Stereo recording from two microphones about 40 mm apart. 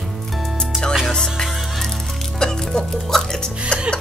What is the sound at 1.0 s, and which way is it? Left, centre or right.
Music, centre.